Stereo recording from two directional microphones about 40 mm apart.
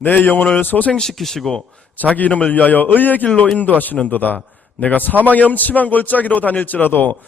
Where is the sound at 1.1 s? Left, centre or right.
Centre.